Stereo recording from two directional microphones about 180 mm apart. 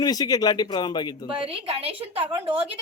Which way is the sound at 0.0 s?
20° left (ahead or behind).